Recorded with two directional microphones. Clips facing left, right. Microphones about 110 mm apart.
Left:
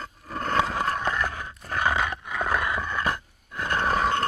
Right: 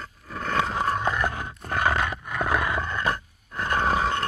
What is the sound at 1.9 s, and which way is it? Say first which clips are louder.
Roar: even; centre (ahead or behind).